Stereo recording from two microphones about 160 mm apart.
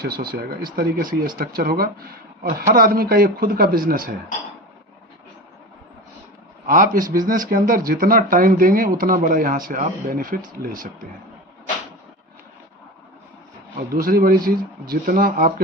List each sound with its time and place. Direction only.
0.0 s speech: 70° right (ahead or behind)
6.7 s speech: 60° right (ahead or behind)
13.7 s speech: 65° right (ahead or behind)